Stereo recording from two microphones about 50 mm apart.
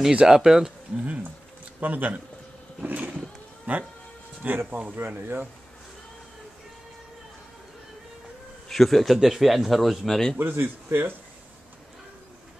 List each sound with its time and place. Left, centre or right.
0.1 s speech: centre
0.9 s a sound: right
1.8 s speech: right
2.9 s a sound: right
3.7 s speech: right
8.6 s speech: centre
10.5 s speech: right